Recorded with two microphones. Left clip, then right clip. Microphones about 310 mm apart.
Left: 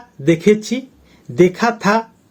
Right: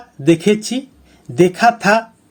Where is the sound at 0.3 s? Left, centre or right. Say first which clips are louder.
Even; right.